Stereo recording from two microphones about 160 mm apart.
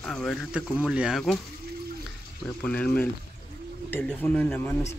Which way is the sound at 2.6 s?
10° left (ahead or behind).